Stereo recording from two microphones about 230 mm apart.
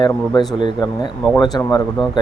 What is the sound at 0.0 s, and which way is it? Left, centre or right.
Speech, centre.